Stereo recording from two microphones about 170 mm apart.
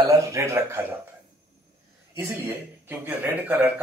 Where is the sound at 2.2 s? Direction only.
15° right (ahead or behind).